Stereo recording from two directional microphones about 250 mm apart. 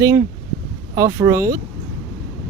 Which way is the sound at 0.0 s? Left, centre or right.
Centre.